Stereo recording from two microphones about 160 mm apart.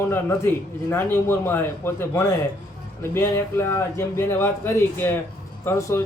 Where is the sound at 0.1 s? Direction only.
15° left (ahead or behind).